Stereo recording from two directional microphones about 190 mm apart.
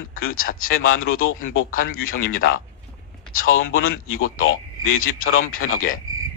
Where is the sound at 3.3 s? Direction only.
90° left.